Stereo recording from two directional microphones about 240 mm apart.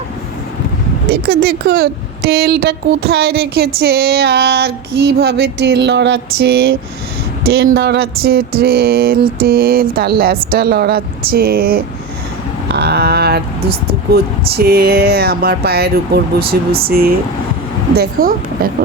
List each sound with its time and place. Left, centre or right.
1.1 s speech: right